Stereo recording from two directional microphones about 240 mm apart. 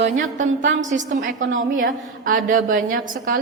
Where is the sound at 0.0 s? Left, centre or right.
Right.